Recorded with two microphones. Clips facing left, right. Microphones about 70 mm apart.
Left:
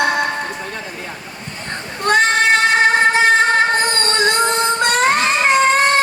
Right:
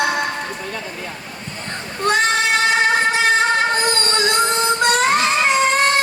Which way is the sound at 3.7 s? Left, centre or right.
Left.